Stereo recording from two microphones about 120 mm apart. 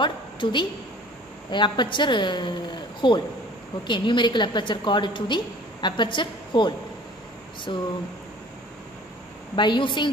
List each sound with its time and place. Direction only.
0.0 s a sound: 40° left (ahead or behind)
1.5 s a woman's voice: 40° left (ahead or behind)
9.6 s a woman's voice: 40° left (ahead or behind)